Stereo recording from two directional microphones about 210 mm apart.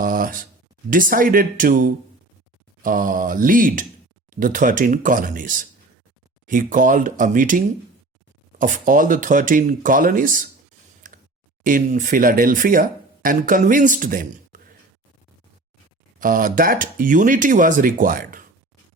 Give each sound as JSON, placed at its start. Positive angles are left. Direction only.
{"t": 0.0, "sound": "a sound", "side_deg": -40}
{"t": 0.9, "sound": "speech", "side_deg": -40}
{"t": 11.1, "sound": "clicking", "side_deg": -40}
{"t": 11.6, "sound": "speech", "side_deg": -40}
{"t": 16.2, "sound": "speech", "side_deg": -40}